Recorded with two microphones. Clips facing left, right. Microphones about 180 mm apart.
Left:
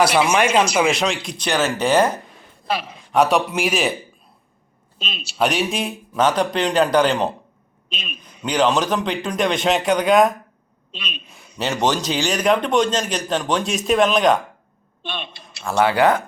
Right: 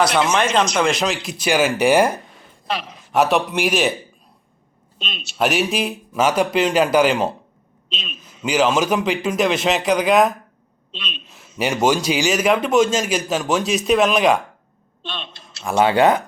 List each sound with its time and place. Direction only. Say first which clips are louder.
0.0 s a man's voice: left 1 dB; 5° left (ahead or behind); by 2.1 s 10° right (ahead or behind)
2.6 s a man's voice: left 2 dB; 5° left (ahead or behind)
4.9 s a man's voice: left 1 dB; centre (ahead or behind)
15.6 s speech: right 1 dB; 20° right (ahead or behind)